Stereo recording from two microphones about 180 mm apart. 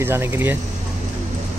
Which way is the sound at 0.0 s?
15° right (ahead or behind).